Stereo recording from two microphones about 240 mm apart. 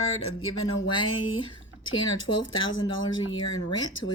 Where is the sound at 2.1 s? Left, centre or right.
Left.